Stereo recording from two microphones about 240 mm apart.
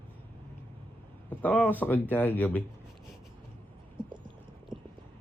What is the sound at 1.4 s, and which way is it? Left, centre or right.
Speech, centre.